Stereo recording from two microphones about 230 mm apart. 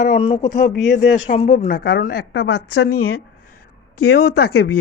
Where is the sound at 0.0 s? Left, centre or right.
Left.